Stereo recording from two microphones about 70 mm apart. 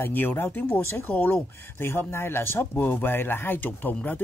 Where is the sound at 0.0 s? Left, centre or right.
Left.